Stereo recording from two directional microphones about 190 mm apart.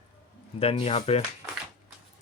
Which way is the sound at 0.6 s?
30° left (ahead or behind).